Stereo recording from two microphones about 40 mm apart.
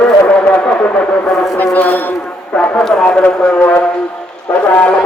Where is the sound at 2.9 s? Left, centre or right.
Left.